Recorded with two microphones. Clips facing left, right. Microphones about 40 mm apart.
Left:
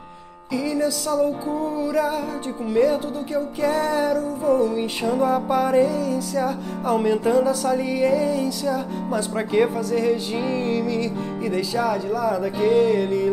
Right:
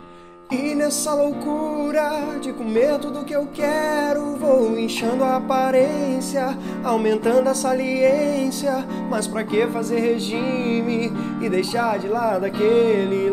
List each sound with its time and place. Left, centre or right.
0.7 s music: right
1.5 s speech: right
4.5 s music: right
7.6 s speech: right
8.0 s speech: right